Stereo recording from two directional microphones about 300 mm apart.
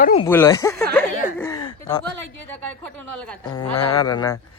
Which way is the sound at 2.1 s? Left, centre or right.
Right.